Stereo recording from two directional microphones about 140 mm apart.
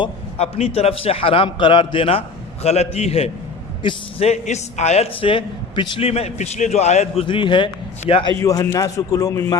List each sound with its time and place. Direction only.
0.3 s a man's voice: 45° left (ahead or behind)
7.3 s a man's voice: 35° left (ahead or behind)
8.4 s a man's voice: 20° left (ahead or behind)